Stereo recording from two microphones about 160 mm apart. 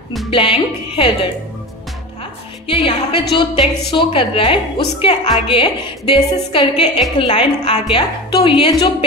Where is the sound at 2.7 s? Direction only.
35° left (ahead or behind).